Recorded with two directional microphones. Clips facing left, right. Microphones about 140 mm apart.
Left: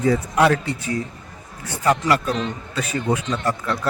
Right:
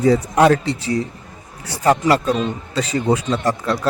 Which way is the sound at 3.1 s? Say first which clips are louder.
Right 3 dB; 35° right (ahead or behind).